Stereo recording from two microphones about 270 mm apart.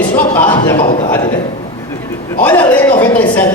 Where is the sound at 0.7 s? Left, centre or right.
Left.